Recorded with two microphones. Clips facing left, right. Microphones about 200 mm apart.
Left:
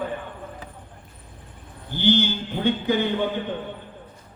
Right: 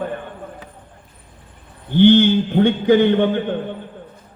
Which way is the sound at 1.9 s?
60° right (ahead or behind).